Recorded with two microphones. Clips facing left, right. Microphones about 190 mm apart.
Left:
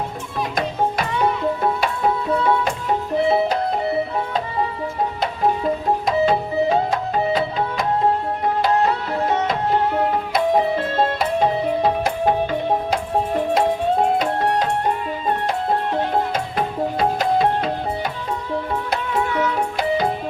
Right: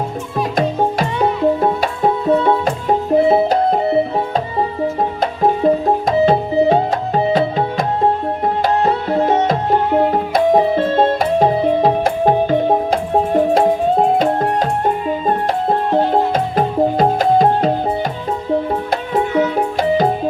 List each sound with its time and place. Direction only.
0.5 s music: 40° right (ahead or behind)
5.2 s music: 45° right (ahead or behind)
8.6 s music: 35° right (ahead or behind)
14.2 s music: 45° right (ahead or behind)
15.9 s music: 35° right (ahead or behind)
16.3 s music: 45° right (ahead or behind)
19.1 s music: 35° right (ahead or behind)